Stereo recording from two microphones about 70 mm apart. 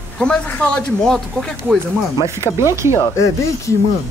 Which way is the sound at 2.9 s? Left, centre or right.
Left.